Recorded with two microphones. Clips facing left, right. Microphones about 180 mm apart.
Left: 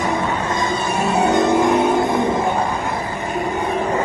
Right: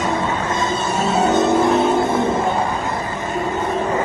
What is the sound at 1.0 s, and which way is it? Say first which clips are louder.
Music: even; 15° left (ahead or behind).